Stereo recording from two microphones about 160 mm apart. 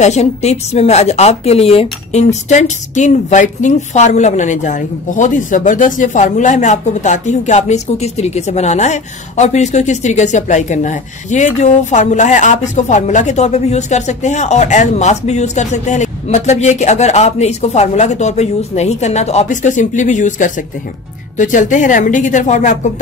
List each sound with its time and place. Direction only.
0.0 s a woman's voice: 45° left (ahead or behind)